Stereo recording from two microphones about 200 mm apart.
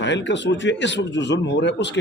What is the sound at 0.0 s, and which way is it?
Speech, 60° left (ahead or behind).